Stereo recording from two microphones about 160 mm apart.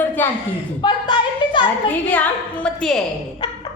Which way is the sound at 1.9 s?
10° left (ahead or behind).